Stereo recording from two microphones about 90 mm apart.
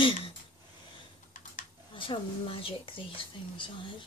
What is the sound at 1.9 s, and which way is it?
A child's voice, 70° left (ahead or behind).